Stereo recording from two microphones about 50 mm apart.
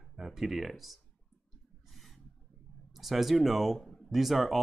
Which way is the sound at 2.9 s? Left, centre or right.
Centre.